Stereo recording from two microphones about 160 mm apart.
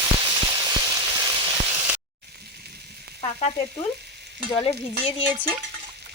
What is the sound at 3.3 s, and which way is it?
Stir, 45° left (ahead or behind).